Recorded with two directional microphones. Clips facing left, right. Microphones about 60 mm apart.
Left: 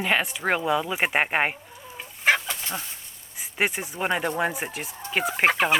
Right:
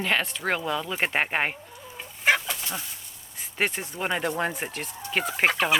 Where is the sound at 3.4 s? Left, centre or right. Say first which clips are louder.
Left 2 dB; centre.